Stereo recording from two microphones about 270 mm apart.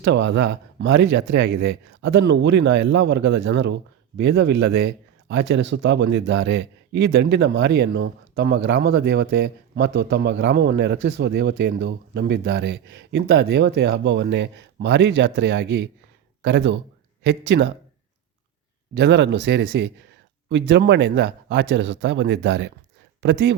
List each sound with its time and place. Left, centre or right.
0.0 s speech: right
18.9 s speech: right